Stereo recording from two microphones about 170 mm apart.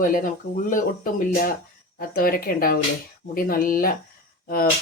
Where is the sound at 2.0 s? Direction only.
60° left (ahead or behind).